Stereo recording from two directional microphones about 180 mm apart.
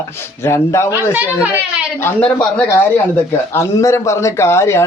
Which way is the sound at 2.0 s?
10° left (ahead or behind).